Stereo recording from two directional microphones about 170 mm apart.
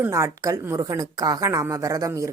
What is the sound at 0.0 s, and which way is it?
Speech, 15° right (ahead or behind).